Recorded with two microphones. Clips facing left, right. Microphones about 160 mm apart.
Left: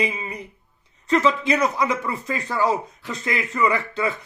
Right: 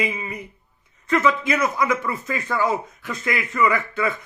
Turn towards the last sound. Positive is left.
turn(degrees=25)  # may be behind; listen again after turning